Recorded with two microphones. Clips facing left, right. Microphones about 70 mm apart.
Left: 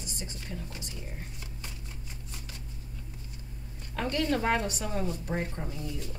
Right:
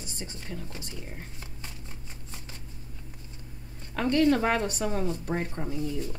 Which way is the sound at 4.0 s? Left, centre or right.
Right.